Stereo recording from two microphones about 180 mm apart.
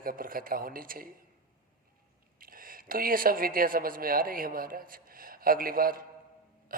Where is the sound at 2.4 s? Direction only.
50° right (ahead or behind).